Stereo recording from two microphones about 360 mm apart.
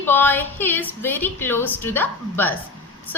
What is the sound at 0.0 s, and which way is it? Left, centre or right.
A woman's voice, centre.